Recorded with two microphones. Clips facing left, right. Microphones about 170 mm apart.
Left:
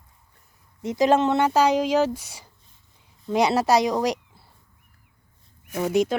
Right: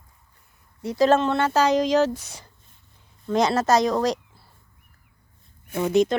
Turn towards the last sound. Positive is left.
turn(degrees=10)  # may be behind; listen again after turning